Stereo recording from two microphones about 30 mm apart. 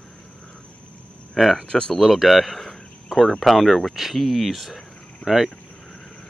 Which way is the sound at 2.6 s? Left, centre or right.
Centre.